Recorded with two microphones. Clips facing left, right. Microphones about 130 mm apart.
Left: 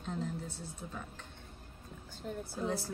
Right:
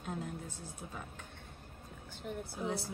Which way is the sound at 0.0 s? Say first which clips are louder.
Left 2 dB; 10° right (ahead or behind).